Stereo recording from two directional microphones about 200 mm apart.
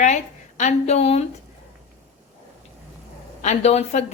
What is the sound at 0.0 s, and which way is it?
A woman's voice, 35° left (ahead or behind).